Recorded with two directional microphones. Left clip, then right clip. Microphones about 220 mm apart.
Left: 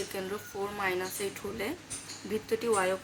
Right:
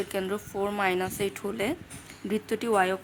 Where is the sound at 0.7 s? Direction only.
55° right (ahead or behind).